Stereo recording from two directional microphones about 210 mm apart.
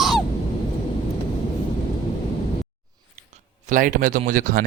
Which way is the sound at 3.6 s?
40° right (ahead or behind).